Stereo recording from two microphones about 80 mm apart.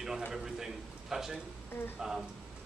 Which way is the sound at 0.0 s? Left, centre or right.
Centre.